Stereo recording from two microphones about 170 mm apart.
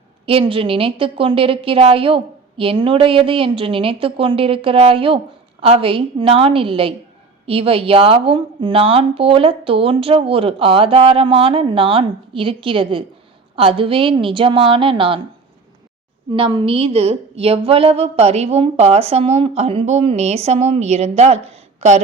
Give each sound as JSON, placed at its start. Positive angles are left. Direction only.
{"t": 0.3, "sound": "a woman's voice", "side_deg": -30}
{"t": 16.3, "sound": "a woman's voice", "side_deg": -30}